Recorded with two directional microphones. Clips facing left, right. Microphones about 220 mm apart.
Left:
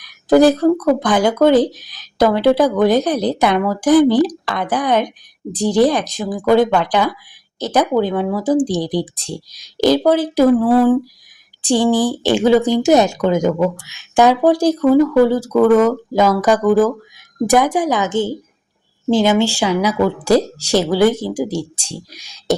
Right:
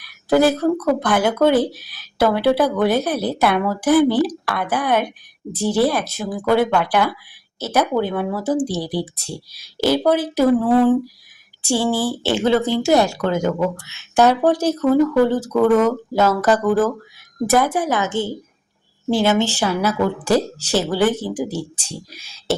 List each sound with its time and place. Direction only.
0.6 s a woman's voice: 15° left (ahead or behind)
2.6 s a woman's voice: 15° left (ahead or behind)